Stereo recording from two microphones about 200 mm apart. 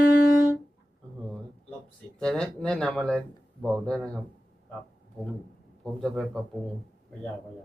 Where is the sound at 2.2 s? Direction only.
5° left (ahead or behind).